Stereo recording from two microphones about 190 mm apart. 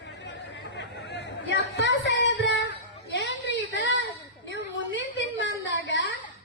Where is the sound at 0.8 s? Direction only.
70° left (ahead or behind).